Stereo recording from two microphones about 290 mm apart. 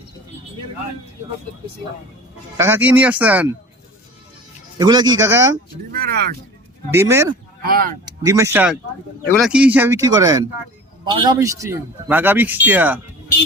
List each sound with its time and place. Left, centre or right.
2.6 s speech: centre
4.8 s speech: centre
6.9 s speech: centre
7.6 s speech: right
8.2 s speech: centre